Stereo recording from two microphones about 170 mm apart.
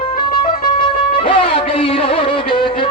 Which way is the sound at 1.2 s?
30° left (ahead or behind).